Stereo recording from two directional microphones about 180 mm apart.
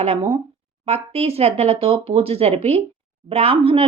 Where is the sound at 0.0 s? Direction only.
35° right (ahead or behind).